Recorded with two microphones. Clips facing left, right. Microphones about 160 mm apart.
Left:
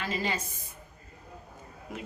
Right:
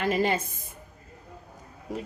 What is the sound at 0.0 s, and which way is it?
Speech, 55° right (ahead or behind).